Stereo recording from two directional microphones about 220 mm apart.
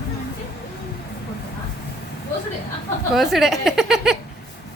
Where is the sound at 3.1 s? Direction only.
Centre (ahead or behind).